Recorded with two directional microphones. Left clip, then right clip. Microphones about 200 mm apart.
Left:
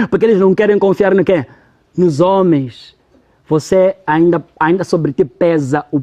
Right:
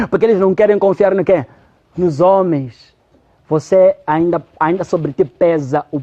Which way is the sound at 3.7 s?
50° left (ahead or behind).